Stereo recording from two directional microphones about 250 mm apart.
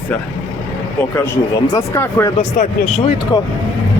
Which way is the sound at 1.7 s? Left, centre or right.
Centre.